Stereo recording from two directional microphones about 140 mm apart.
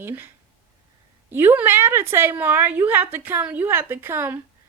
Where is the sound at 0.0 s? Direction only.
15° right (ahead or behind).